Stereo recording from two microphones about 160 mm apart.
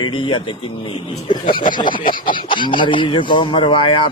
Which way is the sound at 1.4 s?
60° left (ahead or behind).